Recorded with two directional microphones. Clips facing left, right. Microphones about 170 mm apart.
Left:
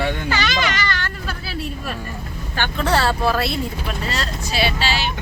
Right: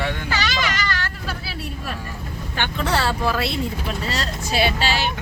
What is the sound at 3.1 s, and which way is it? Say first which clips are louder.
Speech: left 3 dB; 45° left (ahead or behind).